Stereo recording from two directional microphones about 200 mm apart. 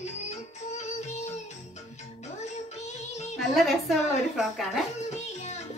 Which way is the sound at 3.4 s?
Centre (ahead or behind).